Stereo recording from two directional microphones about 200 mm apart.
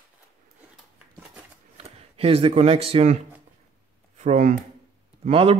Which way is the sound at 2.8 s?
30° right (ahead or behind).